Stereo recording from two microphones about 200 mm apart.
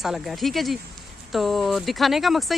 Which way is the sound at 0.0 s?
Centre (ahead or behind).